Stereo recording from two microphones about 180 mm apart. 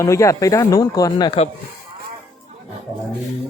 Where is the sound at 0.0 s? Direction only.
15° left (ahead or behind).